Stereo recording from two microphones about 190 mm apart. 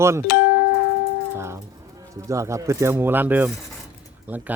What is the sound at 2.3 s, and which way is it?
Speech, 15° right (ahead or behind).